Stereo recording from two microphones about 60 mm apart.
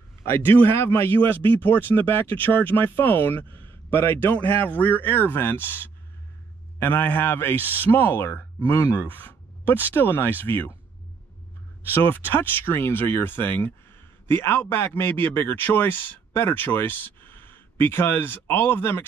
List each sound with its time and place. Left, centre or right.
0.5 s speech: left
6.8 s speech: left
11.9 s speech: left